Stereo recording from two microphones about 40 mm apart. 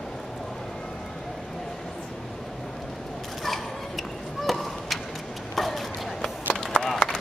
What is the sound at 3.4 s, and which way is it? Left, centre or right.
Biting, centre.